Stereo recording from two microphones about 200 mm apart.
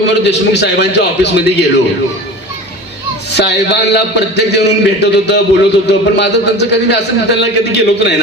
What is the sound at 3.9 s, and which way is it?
A man's voice, 55° left (ahead or behind).